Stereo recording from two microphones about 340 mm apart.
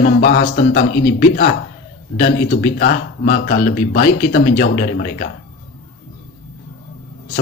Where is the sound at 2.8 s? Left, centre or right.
Left.